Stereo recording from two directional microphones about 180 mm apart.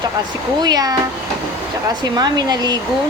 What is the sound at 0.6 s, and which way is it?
Speech, 20° right (ahead or behind).